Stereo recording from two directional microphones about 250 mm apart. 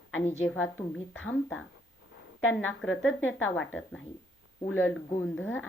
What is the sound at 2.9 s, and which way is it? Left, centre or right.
Speech, left.